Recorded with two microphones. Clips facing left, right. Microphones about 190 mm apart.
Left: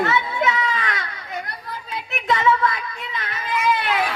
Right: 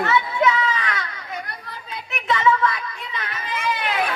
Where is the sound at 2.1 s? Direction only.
35° left (ahead or behind).